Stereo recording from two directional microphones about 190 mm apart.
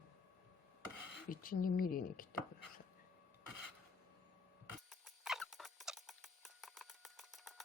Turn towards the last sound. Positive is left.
turn(degrees=0)  # may be behind; listen again after turning